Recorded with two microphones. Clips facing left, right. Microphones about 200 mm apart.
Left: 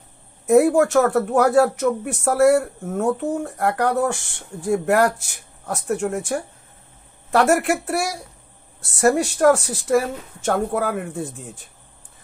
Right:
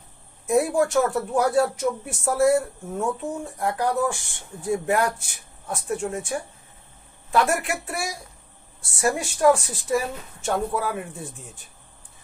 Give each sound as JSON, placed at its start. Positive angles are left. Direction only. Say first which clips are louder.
{"t": 0.5, "sound": "a woman's voice", "louder": "left 6 dB", "side_deg": 65}
{"t": 9.4, "sound": "speech", "louder": "right 1 dB", "side_deg": 75}
{"t": 10.4, "sound": "speech", "louder": "left 4 dB", "side_deg": 65}